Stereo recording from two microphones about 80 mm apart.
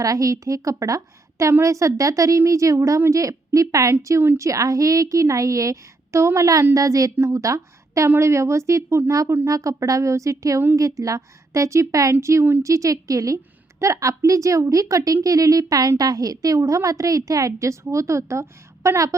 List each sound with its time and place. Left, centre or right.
0.0 s a woman's voice: right